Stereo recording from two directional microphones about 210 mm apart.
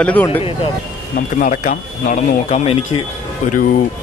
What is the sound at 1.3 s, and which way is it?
Speech, 35° left (ahead or behind).